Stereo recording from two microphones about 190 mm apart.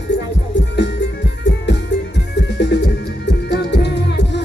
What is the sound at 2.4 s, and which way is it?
Music, 65° left (ahead or behind).